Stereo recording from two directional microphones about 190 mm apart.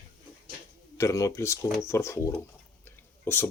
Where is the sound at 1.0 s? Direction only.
15° left (ahead or behind).